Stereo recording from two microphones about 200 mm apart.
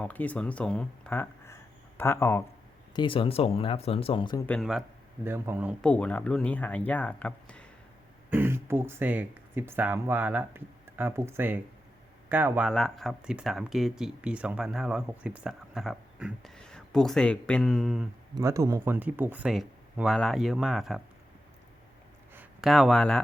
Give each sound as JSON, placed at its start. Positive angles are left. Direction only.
{"t": 0.0, "sound": "speech", "side_deg": 5}
{"t": 2.9, "sound": "speech", "side_deg": 25}
{"t": 4.4, "sound": "speech", "side_deg": 0}
{"t": 5.2, "sound": "speech", "side_deg": -10}
{"t": 5.8, "sound": "speech", "side_deg": 5}
{"t": 8.3, "sound": "speech", "side_deg": -10}
{"t": 18.3, "sound": "speech", "side_deg": -15}
{"t": 22.4, "sound": "speech", "side_deg": 0}